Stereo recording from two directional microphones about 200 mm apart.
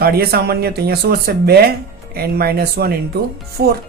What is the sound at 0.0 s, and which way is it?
Speech, 50° right (ahead or behind).